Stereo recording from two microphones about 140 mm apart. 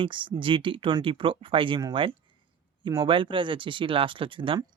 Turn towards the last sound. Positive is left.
turn(degrees=-35)  # may be behind; listen again after turning